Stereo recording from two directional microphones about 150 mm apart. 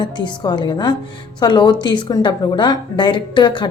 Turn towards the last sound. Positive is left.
turn(degrees=30)  # may be behind; listen again after turning